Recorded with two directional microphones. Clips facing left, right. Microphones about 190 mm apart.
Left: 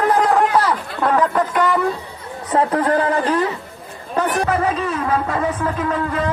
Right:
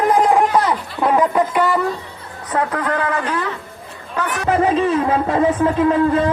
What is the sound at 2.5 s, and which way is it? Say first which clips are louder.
Speech: left 3 dB; 30° left (ahead or behind).